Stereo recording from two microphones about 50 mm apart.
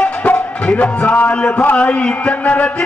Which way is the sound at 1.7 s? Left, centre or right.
Left.